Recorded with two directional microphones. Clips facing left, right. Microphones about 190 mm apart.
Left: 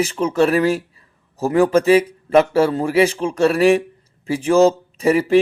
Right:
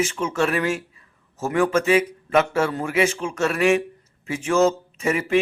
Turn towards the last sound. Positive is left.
turn(degrees=35)  # may be behind; listen again after turning